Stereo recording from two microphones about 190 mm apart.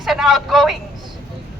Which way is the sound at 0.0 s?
Centre (ahead or behind).